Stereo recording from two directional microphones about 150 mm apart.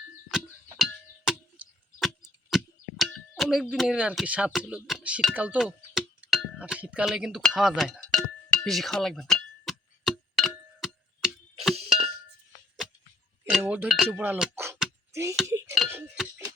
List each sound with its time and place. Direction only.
0.3 s a sound: 5° right (ahead or behind)
3.0 s speech: centre (ahead or behind)
7.4 s music: 5° right (ahead or behind)
13.5 s cowbell: 5° right (ahead or behind)
14.2 s speech: 10° right (ahead or behind)
14.5 s a sound: 15° right (ahead or behind)
15.1 s speech: 20° right (ahead or behind)
15.4 s chink: 20° right (ahead or behind)